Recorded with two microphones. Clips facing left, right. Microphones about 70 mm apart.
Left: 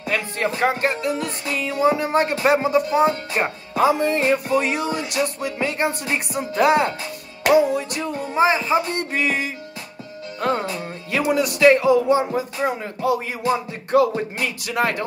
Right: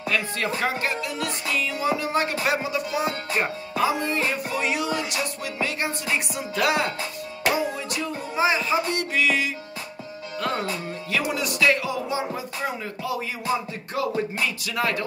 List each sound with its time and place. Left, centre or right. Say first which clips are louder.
0.1 s speech: left 3 dB; left
3.4 s speech: left 1 dB; left
3.7 s speech: left 6 dB; left
7.7 s speech: left 5 dB; left
11.1 s speech: left 6 dB; left
11.6 s music: left 9 dB; left
14.4 s speech: left 3 dB; left